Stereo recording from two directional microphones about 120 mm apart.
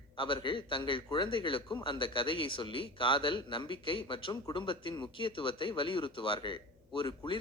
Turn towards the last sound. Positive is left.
turn(degrees=45)  # may be behind; listen again after turning